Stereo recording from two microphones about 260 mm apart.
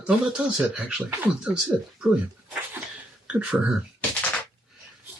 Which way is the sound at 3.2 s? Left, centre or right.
Centre.